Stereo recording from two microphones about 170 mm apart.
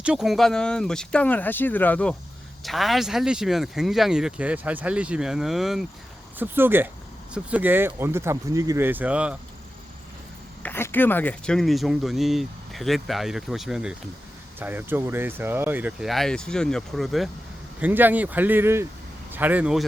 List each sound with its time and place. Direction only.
0.0 s speech: 5° right (ahead or behind)
6.4 s speech: 10° right (ahead or behind)
10.6 s speech: 10° left (ahead or behind)
17.7 s speech: 10° right (ahead or behind)